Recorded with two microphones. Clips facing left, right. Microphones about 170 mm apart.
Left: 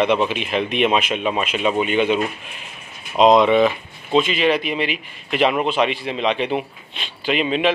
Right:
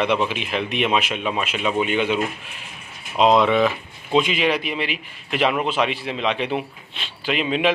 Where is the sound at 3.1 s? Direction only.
5° right (ahead or behind).